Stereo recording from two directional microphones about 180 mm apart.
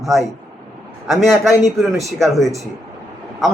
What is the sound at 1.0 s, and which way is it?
A man's voice, centre (ahead or behind).